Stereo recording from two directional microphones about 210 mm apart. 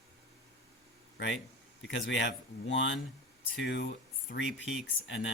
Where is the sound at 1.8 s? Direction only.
60° left (ahead or behind).